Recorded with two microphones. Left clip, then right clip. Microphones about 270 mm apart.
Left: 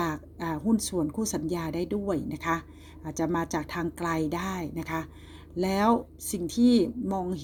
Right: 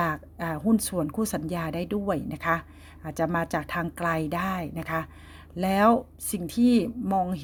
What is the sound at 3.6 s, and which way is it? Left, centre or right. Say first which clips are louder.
Speech: right 3 dB; right.